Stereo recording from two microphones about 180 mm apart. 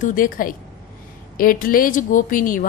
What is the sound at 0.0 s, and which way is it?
Speech, 50° left (ahead or behind).